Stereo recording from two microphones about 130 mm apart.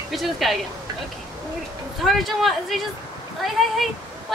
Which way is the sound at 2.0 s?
Centre (ahead or behind).